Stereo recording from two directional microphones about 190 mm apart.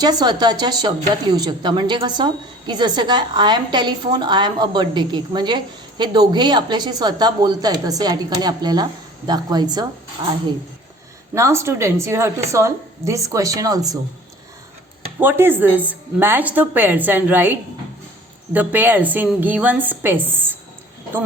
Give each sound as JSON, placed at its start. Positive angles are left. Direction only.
{"t": 0.0, "sound": "speech", "side_deg": -20}
{"t": 11.3, "sound": "speech", "side_deg": -15}
{"t": 15.2, "sound": "speech", "side_deg": -10}